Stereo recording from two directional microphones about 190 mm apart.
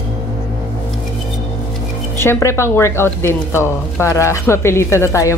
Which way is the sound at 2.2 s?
15° left (ahead or behind).